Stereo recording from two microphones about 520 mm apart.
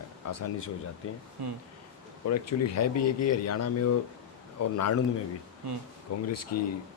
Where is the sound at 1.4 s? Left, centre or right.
Right.